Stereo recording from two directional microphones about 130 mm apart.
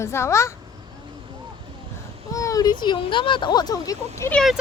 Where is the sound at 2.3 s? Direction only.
25° left (ahead or behind).